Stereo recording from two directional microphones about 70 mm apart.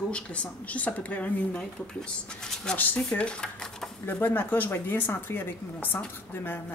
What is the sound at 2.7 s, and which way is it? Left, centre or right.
Speech, left.